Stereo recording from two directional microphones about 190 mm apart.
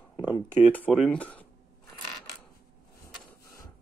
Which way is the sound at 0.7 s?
5° left (ahead or behind).